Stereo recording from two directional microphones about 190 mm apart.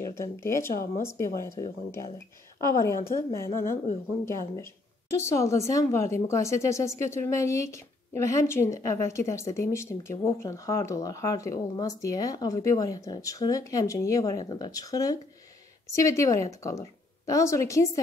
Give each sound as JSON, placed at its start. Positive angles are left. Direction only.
{"t": 0.1, "sound": "speech", "side_deg": 15}
{"t": 3.2, "sound": "a woman's voice", "side_deg": 15}